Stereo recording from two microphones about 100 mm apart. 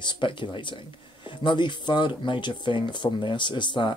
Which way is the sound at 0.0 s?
55° left (ahead or behind).